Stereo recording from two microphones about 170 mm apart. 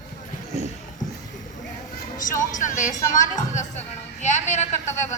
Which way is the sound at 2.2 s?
50° left (ahead or behind).